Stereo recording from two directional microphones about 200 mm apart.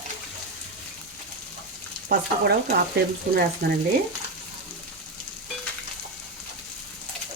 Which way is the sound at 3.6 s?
55° right (ahead or behind).